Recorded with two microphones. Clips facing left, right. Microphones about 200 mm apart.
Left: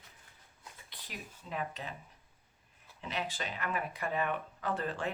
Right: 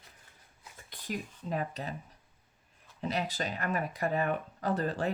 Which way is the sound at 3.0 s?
40° right (ahead or behind).